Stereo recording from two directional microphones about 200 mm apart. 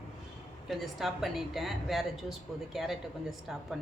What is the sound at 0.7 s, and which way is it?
A woman's voice, centre (ahead or behind).